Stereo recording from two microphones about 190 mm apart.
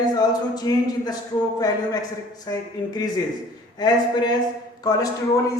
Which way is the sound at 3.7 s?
20° left (ahead or behind).